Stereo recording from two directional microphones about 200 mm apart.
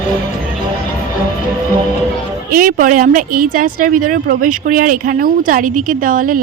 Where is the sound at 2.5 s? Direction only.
45° right (ahead or behind).